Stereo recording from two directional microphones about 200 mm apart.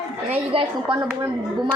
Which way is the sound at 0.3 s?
25° right (ahead or behind).